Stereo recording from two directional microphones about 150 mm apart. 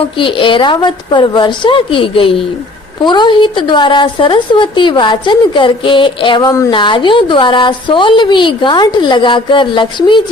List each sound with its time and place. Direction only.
0.2 s speech: 35° left (ahead or behind)
6.4 s speech: 20° left (ahead or behind)
6.7 s speech: 30° left (ahead or behind)